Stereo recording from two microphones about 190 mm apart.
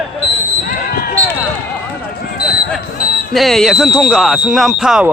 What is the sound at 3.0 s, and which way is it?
Music, 50° left (ahead or behind).